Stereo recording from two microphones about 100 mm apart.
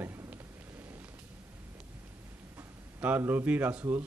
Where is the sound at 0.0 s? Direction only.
20° right (ahead or behind).